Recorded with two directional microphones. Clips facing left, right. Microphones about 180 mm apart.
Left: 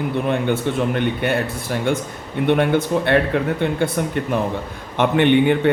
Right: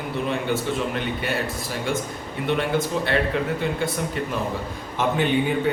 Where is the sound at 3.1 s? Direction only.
60° left (ahead or behind).